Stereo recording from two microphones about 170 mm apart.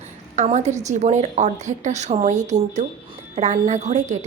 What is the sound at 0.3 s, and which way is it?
A woman's voice, 40° right (ahead or behind).